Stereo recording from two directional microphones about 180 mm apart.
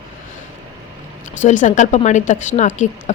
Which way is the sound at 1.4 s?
45° left (ahead or behind).